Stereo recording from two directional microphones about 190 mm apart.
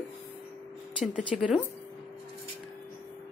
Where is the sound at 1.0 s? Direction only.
5° right (ahead or behind).